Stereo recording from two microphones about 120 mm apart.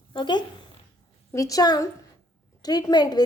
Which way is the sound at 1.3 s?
25° left (ahead or behind).